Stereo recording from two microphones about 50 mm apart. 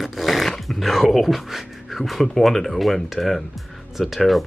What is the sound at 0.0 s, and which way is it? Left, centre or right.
Speech, centre.